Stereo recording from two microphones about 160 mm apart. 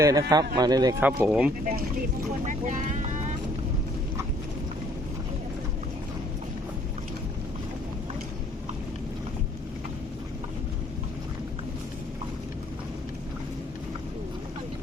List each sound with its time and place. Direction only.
0.0 s a man's voice: 20° right (ahead or behind)
0.9 s speech: 10° right (ahead or behind)
2.4 s speech: 50° right (ahead or behind)